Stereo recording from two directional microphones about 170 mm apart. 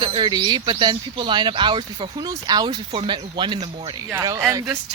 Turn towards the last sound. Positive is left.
turn(degrees=-15)  # may be behind; listen again after turning